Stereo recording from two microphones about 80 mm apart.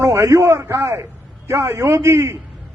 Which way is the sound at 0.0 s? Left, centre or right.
Right.